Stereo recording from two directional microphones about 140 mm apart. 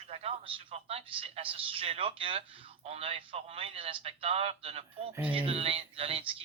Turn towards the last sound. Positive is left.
turn(degrees=-40)  # may be behind; listen again after turning